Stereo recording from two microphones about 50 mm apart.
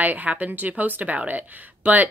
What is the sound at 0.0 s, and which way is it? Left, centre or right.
Speech, right.